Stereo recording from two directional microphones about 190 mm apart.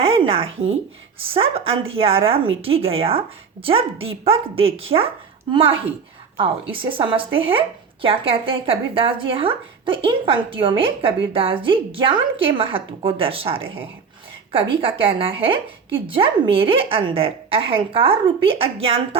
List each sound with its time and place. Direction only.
0.0 s speech: 30° right (ahead or behind)
14.8 s speech: 30° right (ahead or behind)